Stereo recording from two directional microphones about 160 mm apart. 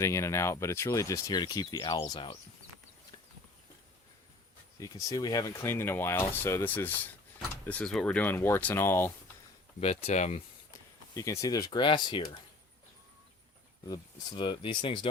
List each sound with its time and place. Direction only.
0.0 s speech: 15° left (ahead or behind)
4.8 s speech: 20° left (ahead or behind)
9.8 s speech: 40° left (ahead or behind)
11.1 s speech: 20° left (ahead or behind)
13.8 s speech: 25° left (ahead or behind)